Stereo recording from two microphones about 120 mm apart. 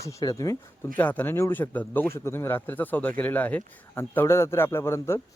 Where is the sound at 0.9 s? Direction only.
15° left (ahead or behind).